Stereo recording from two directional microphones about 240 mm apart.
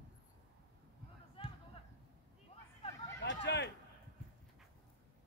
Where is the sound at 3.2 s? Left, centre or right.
Left.